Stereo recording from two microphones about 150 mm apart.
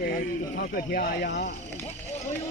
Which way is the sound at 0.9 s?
80° left.